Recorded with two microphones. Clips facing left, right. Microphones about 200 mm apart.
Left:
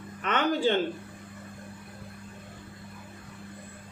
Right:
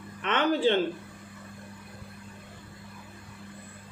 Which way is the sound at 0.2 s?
45° left (ahead or behind).